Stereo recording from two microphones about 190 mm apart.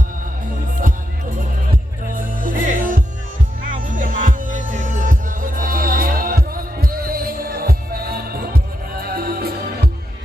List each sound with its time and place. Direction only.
2.1 s music: 45° right (ahead or behind)